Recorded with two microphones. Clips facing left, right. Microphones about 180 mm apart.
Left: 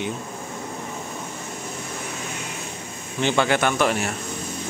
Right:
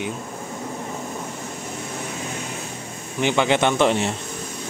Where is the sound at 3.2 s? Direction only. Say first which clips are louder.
Right 1 dB; 15° right (ahead or behind).